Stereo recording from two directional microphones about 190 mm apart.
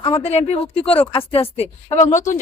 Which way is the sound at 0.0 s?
30° left (ahead or behind).